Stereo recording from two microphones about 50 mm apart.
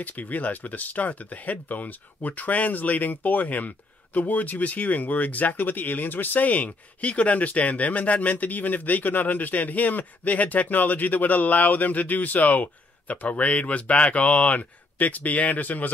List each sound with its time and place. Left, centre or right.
0.0 s speech: left